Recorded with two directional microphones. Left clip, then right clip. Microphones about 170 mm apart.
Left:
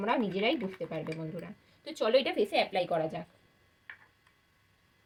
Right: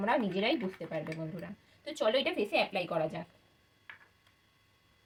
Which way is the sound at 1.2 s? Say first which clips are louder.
Left 1 dB; 25° left (ahead or behind).